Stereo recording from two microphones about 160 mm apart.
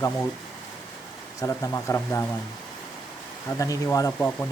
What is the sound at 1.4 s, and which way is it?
Speech, 20° left (ahead or behind).